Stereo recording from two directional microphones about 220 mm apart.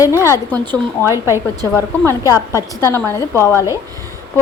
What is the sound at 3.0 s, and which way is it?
Speech, 10° left (ahead or behind).